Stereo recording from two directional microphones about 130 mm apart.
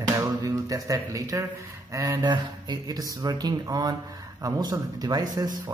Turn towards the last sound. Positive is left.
turn(degrees=-30)  # may be behind; listen again after turning